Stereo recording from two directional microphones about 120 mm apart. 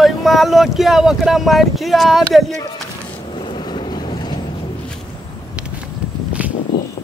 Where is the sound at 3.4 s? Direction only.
40° left (ahead or behind).